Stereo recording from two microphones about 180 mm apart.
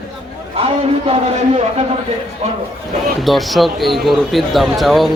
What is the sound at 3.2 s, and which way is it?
Speech, centre (ahead or behind).